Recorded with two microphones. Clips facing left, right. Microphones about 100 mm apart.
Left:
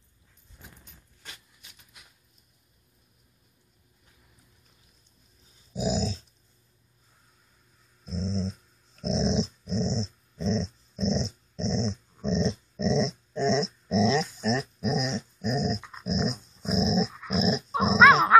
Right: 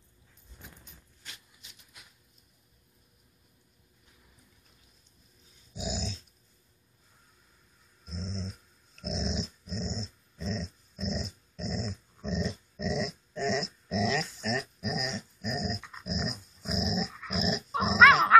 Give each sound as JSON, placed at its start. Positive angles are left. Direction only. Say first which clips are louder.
{"t": 5.8, "sound": "dog", "louder": "left 8 dB", "side_deg": 35}
{"t": 8.0, "sound": "dog", "louder": "left 8 dB", "side_deg": 35}